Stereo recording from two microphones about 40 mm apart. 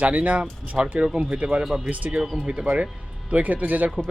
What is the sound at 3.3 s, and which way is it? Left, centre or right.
Speech, right.